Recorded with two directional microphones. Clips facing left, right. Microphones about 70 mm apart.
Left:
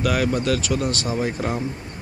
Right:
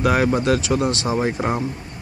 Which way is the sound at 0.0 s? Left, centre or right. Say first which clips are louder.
Right 3 dB; right.